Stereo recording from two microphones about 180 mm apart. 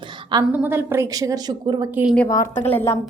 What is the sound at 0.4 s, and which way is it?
A woman's voice, 10° right (ahead or behind).